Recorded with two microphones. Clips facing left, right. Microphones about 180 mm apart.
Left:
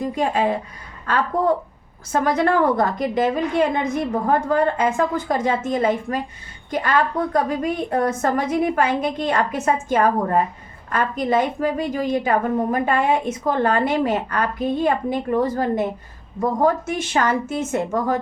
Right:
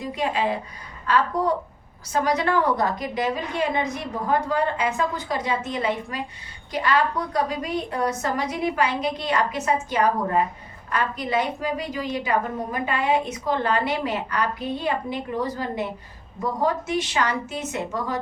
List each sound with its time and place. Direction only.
0.0 s a woman's voice: 50° left (ahead or behind)